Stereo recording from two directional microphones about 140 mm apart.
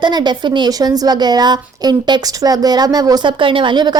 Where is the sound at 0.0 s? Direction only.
30° right (ahead or behind).